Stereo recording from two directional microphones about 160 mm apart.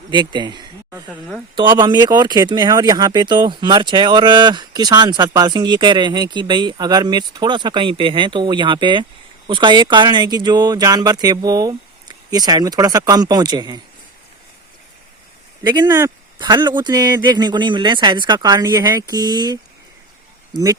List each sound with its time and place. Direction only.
0.1 s speech: 30° right (ahead or behind)
15.6 s speech: 20° right (ahead or behind)